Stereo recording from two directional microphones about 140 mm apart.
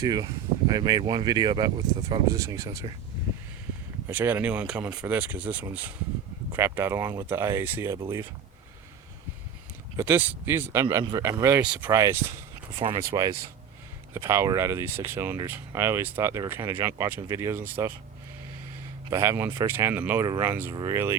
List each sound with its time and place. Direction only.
0.0 s speech: 25° right (ahead or behind)
2.3 s speech: 20° right (ahead or behind)
4.1 s speech: 15° right (ahead or behind)
10.0 s speech: 15° right (ahead or behind)
11.6 s speech: 10° right (ahead or behind)
11.9 s speech: 20° right (ahead or behind)
19.1 s speech: 15° right (ahead or behind)